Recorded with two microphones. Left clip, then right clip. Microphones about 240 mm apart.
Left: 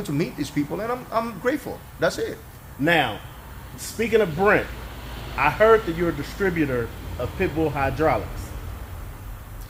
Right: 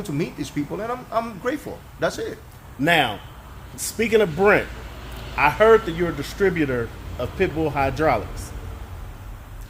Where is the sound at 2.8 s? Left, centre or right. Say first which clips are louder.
Right 2 dB; right.